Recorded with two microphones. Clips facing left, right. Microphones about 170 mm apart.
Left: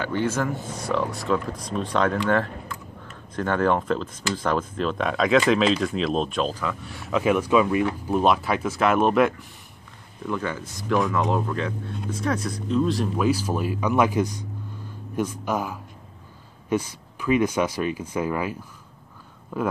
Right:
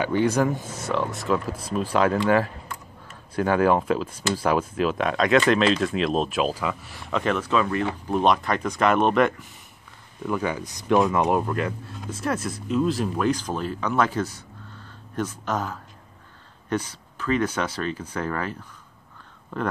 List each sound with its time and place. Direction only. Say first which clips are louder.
0.0 s speech: right 3 dB; 15° right (ahead or behind)
0.7 s speech: left 1 dB; centre (ahead or behind)
10.2 s speech: right 2 dB; 10° right (ahead or behind); by 19.7 s 10° left (ahead or behind)